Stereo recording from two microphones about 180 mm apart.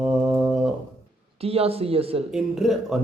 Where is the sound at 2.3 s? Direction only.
Centre (ahead or behind).